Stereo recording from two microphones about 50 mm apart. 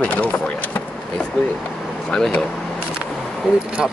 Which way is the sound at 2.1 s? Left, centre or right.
Centre.